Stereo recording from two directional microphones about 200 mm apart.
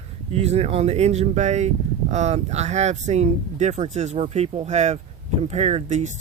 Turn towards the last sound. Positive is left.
turn(degrees=-35)  # may be behind; listen again after turning